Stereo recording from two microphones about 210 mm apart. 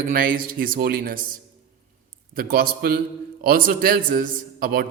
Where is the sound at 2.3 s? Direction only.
45° right (ahead or behind).